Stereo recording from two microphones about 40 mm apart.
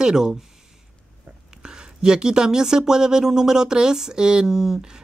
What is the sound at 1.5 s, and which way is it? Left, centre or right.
Speech, centre.